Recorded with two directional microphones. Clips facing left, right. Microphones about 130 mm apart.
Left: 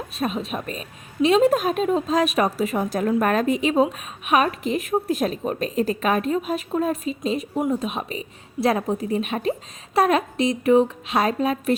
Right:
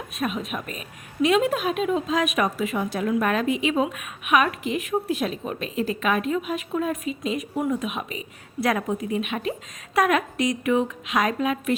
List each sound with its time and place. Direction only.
0.2 s a woman's voice: 30° left (ahead or behind)